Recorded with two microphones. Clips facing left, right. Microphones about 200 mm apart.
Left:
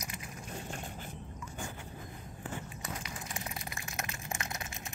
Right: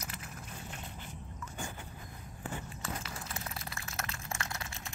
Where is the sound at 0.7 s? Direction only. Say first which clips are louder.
Left 4 dB; 45° left (ahead or behind).